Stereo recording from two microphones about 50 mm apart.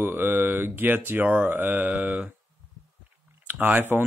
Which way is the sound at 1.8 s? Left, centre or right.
Right.